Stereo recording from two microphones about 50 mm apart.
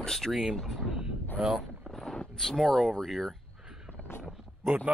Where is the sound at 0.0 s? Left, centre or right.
Centre.